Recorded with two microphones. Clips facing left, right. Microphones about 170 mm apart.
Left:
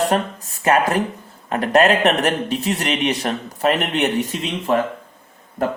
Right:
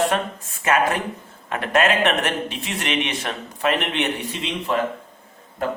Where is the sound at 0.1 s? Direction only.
40° left (ahead or behind).